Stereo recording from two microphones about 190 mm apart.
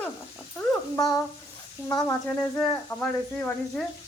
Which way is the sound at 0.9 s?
20° left (ahead or behind).